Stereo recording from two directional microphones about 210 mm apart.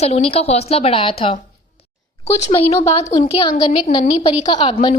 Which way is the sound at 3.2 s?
25° left (ahead or behind).